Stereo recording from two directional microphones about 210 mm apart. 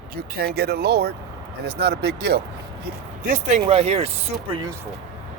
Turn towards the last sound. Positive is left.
turn(degrees=-20)  # may be behind; listen again after turning